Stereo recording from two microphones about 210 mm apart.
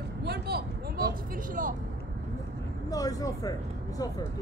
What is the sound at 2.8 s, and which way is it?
Speech, 15° left (ahead or behind).